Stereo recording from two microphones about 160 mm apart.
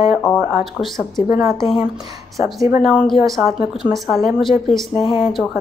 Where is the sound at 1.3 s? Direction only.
20° right (ahead or behind).